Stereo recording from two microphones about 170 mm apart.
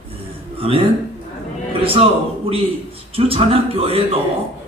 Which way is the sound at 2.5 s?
35° right (ahead or behind).